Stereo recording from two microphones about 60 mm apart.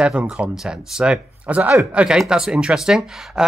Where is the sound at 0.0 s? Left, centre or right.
Right.